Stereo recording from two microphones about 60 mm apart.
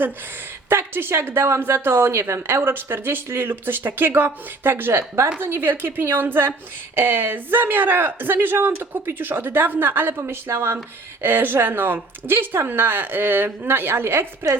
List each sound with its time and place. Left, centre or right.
0.7 s speech: right